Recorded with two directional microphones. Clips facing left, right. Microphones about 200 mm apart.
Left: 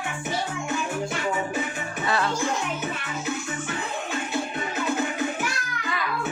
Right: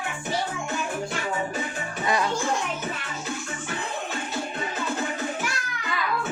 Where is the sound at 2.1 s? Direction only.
15° right (ahead or behind).